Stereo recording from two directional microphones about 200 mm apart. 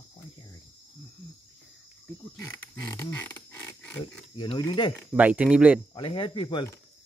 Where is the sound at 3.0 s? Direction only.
10° left (ahead or behind).